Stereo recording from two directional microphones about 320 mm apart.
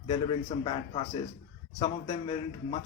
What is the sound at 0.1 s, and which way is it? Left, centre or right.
Speech, centre.